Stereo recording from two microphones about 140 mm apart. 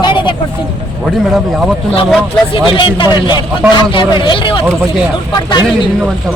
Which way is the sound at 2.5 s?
35° left (ahead or behind).